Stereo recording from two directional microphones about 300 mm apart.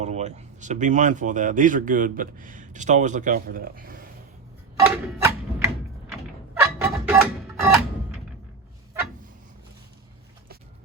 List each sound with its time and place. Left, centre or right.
0.0 s speech: right
5.2 s a sound: centre
6.5 s music: centre